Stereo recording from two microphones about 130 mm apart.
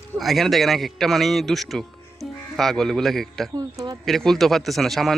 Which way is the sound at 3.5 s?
30° right (ahead or behind).